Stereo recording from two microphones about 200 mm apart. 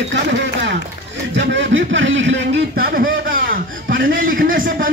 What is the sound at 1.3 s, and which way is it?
Speech, 70° right (ahead or behind).